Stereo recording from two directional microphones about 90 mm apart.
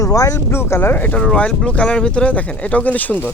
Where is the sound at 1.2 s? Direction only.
10° left (ahead or behind).